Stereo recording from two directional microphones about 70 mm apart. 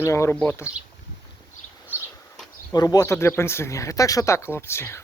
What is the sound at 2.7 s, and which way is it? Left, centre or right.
Speech, left.